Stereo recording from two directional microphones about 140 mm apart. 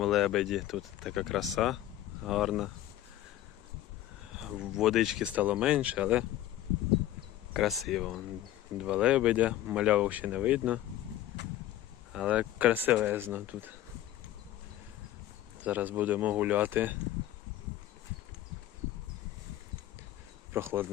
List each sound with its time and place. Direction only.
0.0 s speech: centre (ahead or behind)
4.3 s speech: 5° right (ahead or behind)
7.5 s speech: centre (ahead or behind)
12.1 s speech: 5° right (ahead or behind)
15.6 s speech: 10° right (ahead or behind)
20.5 s speech: 15° right (ahead or behind)